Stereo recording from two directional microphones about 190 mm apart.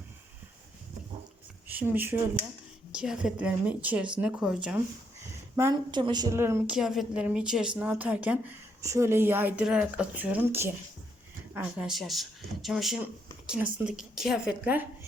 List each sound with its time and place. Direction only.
1.6 s a woman's voice: 10° right (ahead or behind)
5.5 s speech: 20° right (ahead or behind)
6.7 s a woman's voice: centre (ahead or behind)